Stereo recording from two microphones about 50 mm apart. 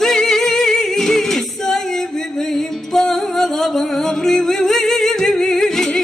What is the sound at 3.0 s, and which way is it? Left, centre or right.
Music, centre.